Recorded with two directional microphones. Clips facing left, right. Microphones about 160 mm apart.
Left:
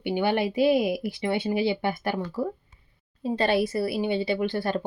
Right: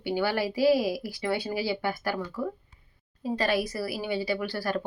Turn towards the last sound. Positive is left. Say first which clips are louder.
# left 3 dB
turn(degrees=25)  # may be behind; listen again after turning